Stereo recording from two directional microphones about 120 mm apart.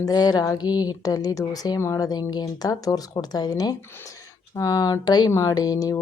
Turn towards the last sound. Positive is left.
turn(degrees=30)  # may be behind; listen again after turning